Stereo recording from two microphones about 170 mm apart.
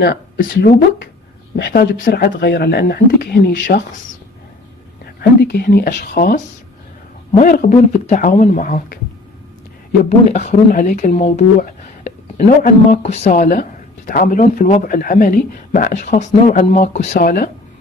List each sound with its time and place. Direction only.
0.0 s speech: 65° left (ahead or behind); by 3.8 s 80° left
5.4 s speech: 70° left (ahead or behind)
10.0 s speech: 45° left (ahead or behind)
13.0 s speech: 40° left (ahead or behind)
17.2 s speech: 60° left (ahead or behind)